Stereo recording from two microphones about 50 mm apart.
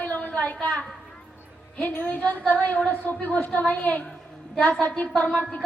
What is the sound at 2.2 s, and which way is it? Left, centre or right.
A woman's voice, left.